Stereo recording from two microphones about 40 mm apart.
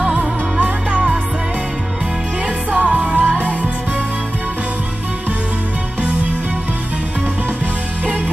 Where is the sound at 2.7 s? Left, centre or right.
Right.